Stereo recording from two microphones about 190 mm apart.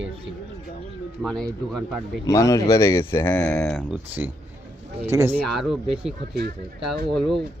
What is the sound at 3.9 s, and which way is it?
Speech, 10° right (ahead or behind).